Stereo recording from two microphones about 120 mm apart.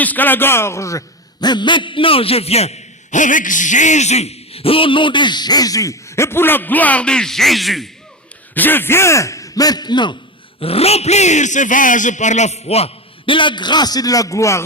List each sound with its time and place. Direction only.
0.0 s a man's voice: 15° left (ahead or behind)
8.5 s speech: 15° left (ahead or behind); by 10.2 s 40° left (ahead or behind)
10.6 s speech: 55° left (ahead or behind); by 14.6 s 25° left (ahead or behind)